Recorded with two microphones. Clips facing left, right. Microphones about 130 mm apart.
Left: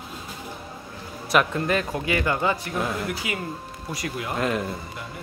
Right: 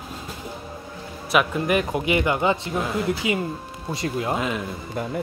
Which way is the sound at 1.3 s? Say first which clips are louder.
Right 1 dB; 10° right (ahead or behind).